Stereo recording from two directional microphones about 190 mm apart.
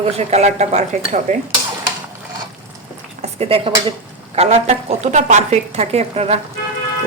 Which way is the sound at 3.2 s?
30° right (ahead or behind).